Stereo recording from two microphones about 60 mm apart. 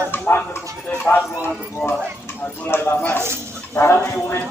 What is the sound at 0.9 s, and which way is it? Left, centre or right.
Clip-clop, left.